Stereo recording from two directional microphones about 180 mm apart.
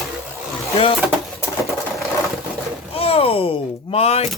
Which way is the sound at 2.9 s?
30° left (ahead or behind).